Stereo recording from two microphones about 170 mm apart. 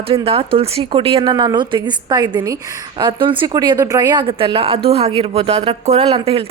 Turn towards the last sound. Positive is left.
turn(degrees=-35)  # may be behind; listen again after turning